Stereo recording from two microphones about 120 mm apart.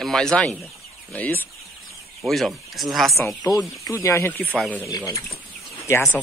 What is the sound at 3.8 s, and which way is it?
Speech, 25° left (ahead or behind).